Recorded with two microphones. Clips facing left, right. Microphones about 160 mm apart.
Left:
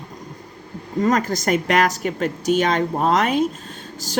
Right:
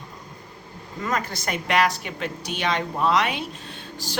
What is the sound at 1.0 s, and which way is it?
Speech, 40° left (ahead or behind).